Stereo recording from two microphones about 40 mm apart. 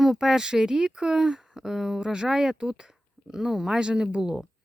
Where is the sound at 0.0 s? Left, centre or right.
Centre.